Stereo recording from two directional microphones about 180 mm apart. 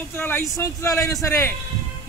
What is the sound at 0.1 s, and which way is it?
A man's voice, 10° left (ahead or behind).